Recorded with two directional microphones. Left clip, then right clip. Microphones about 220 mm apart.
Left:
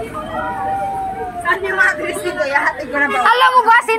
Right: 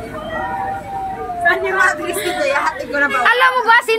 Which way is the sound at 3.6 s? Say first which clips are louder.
Left 1 dB; 40° right (ahead or behind).